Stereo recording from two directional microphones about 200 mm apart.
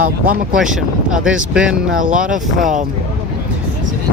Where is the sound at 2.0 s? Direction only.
40° right (ahead or behind).